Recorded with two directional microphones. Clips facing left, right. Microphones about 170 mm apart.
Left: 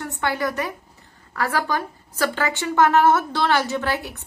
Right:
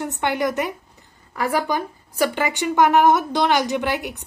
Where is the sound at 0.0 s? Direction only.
20° right (ahead or behind).